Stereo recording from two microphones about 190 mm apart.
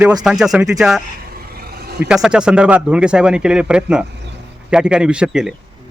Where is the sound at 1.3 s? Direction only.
55° right (ahead or behind).